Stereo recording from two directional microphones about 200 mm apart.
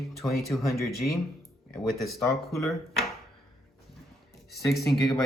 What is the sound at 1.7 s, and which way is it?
Speech, centre (ahead or behind).